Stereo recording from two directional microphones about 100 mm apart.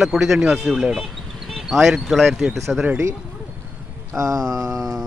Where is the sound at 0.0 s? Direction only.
5° right (ahead or behind).